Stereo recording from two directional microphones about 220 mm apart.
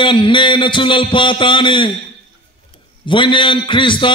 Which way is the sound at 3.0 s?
20° left (ahead or behind).